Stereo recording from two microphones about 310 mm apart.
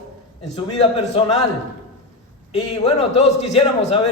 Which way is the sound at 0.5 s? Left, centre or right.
Centre.